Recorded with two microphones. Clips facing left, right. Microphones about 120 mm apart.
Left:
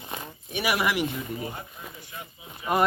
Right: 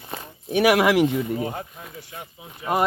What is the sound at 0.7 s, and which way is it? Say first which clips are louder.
Speech: right 7 dB; 90° right.